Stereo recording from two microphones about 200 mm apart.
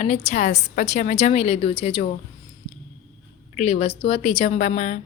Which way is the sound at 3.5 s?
30° left (ahead or behind).